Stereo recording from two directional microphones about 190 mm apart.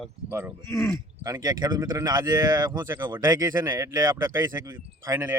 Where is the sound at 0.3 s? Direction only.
15° right (ahead or behind).